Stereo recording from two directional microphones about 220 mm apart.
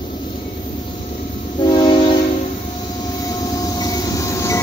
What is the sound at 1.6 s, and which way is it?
Train, 20° left (ahead or behind).